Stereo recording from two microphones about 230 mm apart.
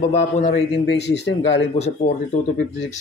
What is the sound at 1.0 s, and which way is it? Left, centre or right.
Speech, left.